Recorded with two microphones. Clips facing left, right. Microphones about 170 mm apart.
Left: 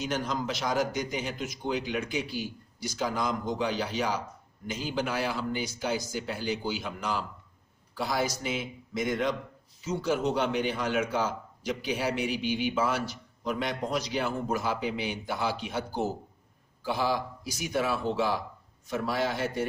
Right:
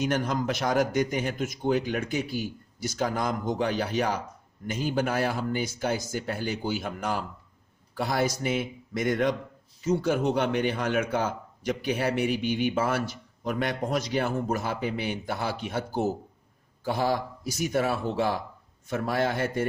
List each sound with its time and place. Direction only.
0.0 s speech: 55° right (ahead or behind)